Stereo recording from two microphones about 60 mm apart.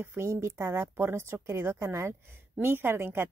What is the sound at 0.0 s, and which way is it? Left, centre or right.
Speech, right.